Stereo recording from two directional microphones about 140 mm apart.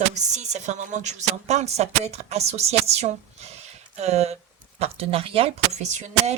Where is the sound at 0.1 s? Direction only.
55° right (ahead or behind).